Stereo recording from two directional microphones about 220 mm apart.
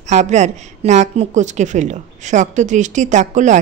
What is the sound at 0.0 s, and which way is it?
A woman's voice, 30° right (ahead or behind).